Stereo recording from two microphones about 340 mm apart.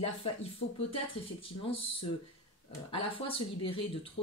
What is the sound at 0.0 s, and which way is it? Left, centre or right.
Speech, centre.